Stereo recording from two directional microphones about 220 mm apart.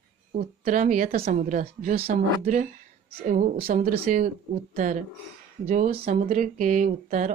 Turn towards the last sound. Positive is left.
turn(degrees=-35)  # may be behind; listen again after turning